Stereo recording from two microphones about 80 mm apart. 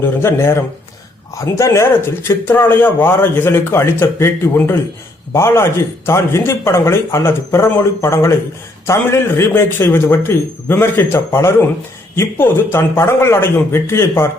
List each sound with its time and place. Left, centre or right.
0.0 s a man's voice: left